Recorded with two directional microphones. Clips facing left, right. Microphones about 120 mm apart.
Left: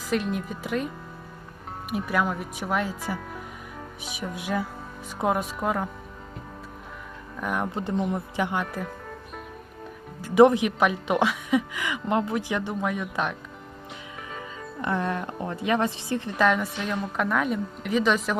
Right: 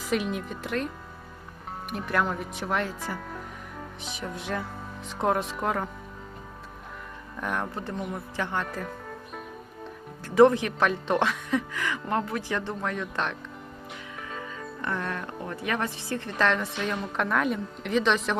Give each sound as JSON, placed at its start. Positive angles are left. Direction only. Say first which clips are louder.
{"t": 0.1, "sound": "a woman's voice", "louder": "left 1 dB", "side_deg": 0}
{"t": 1.9, "sound": "a woman's voice", "louder": "left 2 dB", "side_deg": 5}
{"t": 7.3, "sound": "speech", "louder": "left 2 dB", "side_deg": 5}
{"t": 7.6, "sound": "a woman's voice", "louder": "left 5 dB", "side_deg": 20}
{"t": 10.3, "sound": "speech", "louder": "left 2 dB", "side_deg": 15}
{"t": 14.3, "sound": "speech", "louder": "left 2 dB", "side_deg": 20}
{"t": 16.4, "sound": "a woman's voice", "louder": "left 2 dB", "side_deg": 5}